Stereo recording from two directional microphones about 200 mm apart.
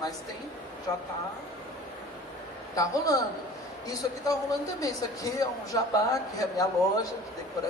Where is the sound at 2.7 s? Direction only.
15° left (ahead or behind).